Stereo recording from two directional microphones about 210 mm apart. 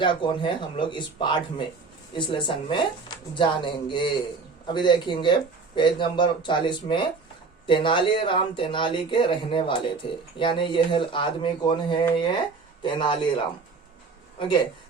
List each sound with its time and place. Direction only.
0.0 s speech: 25° left (ahead or behind)